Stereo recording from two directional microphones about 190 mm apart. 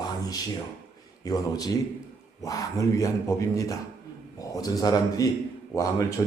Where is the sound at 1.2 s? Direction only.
20° left (ahead or behind).